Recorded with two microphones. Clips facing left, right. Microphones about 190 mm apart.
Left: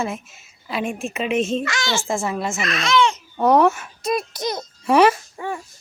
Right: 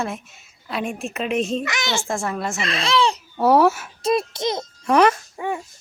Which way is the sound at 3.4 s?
5° right (ahead or behind).